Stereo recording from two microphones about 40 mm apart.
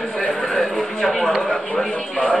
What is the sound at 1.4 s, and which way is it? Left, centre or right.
Speech, centre.